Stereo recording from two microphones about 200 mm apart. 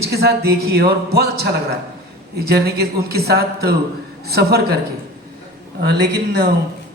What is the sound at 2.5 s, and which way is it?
A man's voice, 55° right (ahead or behind).